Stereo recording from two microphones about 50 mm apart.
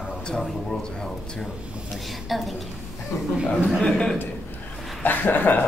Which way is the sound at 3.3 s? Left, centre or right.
Centre.